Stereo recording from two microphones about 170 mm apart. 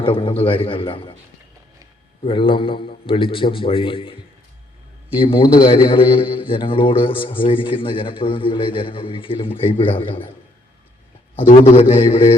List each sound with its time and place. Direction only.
0.0 s a man's voice: 30° left (ahead or behind)
2.2 s a man's voice: 30° left (ahead or behind)
5.2 s a man's voice: 30° left (ahead or behind)
11.5 s a man's voice: 40° left (ahead or behind)